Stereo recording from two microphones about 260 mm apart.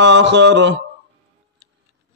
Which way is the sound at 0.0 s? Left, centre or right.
Right.